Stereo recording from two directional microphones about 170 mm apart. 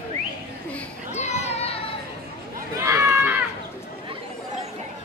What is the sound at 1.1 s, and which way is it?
Children playing, 40° left (ahead or behind).